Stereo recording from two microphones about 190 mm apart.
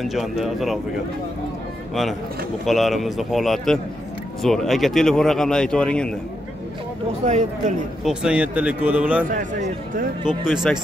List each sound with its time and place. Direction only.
0.0 s speech: centre (ahead or behind)
2.6 s speech: centre (ahead or behind)
8.0 s speech: 5° right (ahead or behind)
9.3 s speech: 45° right (ahead or behind)
10.2 s speech: 5° right (ahead or behind)